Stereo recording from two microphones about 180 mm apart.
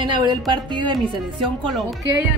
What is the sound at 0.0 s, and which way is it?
Speech, 25° right (ahead or behind).